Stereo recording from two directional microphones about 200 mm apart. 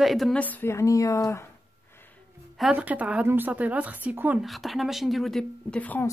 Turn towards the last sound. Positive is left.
turn(degrees=10)  # may be behind; listen again after turning